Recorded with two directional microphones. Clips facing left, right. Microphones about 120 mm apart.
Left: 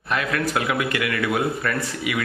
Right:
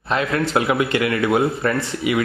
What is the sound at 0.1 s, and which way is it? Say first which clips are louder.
Speech: right 4 dB; 25° right (ahead or behind).